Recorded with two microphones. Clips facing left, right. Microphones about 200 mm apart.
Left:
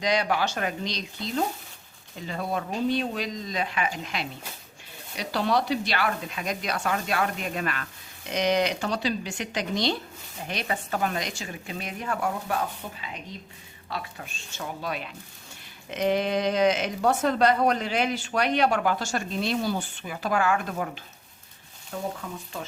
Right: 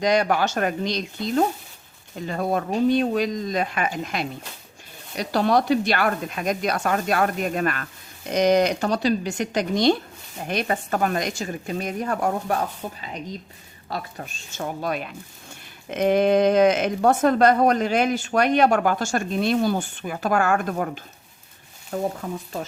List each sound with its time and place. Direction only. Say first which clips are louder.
0.0 s speech: right 5 dB; 50° right (ahead or behind)